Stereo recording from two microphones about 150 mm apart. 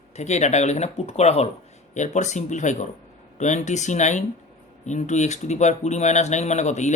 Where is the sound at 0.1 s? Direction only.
50° left (ahead or behind).